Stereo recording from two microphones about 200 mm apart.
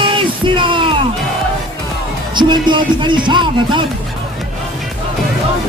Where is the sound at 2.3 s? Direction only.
25° right (ahead or behind).